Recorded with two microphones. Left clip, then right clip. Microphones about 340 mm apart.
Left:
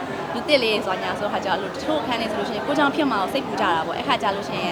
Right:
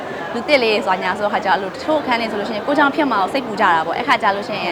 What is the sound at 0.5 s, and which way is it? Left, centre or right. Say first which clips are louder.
Speech: right 5 dB; centre.